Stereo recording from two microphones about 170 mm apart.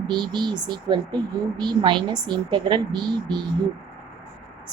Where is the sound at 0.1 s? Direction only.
25° right (ahead or behind).